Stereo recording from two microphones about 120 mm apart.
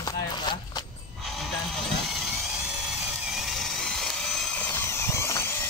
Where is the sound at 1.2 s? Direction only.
Centre (ahead or behind).